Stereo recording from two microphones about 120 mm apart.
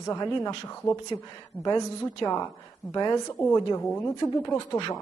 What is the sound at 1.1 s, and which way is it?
Speech, 40° left (ahead or behind).